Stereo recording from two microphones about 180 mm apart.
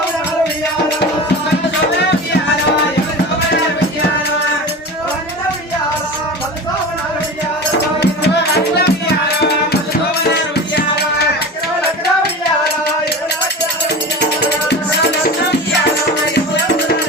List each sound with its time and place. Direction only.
8.0 s music: 65° left (ahead or behind)
16.3 s music: 65° left (ahead or behind)